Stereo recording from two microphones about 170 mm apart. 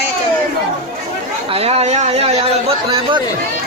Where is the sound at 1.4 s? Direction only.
35° right (ahead or behind).